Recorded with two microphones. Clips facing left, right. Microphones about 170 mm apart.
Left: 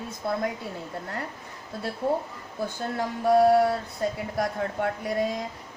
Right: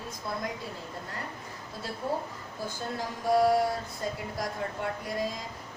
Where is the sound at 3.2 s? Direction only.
60° left (ahead or behind).